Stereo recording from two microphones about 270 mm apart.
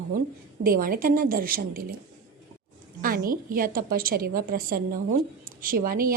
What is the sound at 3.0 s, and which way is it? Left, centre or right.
A woman's voice, right.